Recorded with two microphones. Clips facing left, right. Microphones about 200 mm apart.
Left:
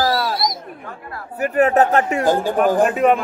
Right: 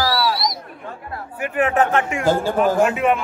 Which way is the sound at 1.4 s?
40° left (ahead or behind).